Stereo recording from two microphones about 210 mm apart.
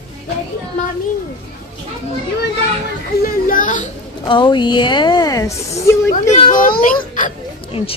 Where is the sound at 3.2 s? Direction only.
40° left (ahead or behind).